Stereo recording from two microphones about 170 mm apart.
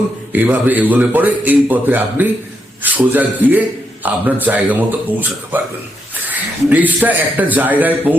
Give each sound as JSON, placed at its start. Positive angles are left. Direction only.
{"t": 0.3, "sound": "a man's voice", "side_deg": -10}